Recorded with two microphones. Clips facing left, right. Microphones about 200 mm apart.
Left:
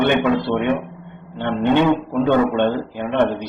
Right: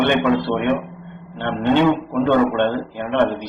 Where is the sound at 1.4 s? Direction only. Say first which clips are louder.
Even; 15° left (ahead or behind).